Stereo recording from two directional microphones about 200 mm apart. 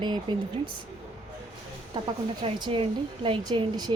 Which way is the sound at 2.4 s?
25° right (ahead or behind).